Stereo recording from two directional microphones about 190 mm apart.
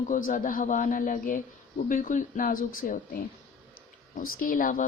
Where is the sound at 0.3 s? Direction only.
45° left (ahead or behind).